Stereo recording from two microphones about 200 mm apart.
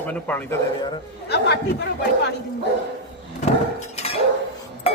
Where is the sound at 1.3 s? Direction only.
60° left (ahead or behind).